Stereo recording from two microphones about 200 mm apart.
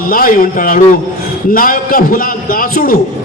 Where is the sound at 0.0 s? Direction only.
45° left (ahead or behind).